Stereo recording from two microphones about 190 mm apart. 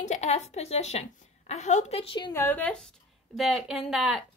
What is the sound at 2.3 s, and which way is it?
Speech, 10° left (ahead or behind).